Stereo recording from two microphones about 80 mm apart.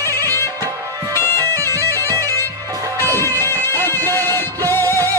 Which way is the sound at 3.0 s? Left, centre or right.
Left.